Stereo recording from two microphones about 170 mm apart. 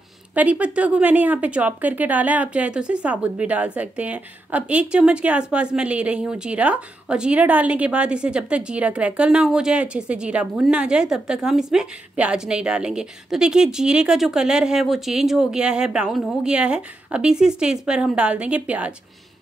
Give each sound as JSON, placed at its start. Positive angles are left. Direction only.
{"t": 0.3, "sound": "speech", "side_deg": -10}